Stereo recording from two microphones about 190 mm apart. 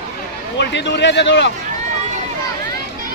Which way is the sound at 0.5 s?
65° left (ahead or behind).